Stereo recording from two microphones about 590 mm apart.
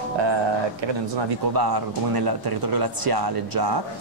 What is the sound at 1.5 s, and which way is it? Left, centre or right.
Speech, right.